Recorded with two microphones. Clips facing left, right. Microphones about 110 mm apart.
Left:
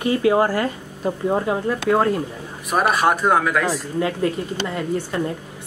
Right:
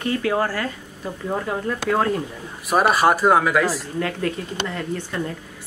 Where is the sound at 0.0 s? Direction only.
15° left (ahead or behind); by 3.8 s 5° right (ahead or behind).